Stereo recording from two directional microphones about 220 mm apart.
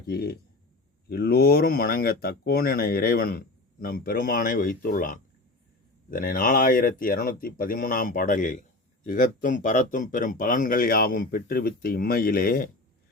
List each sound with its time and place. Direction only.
0.1 s speech: 45° left (ahead or behind)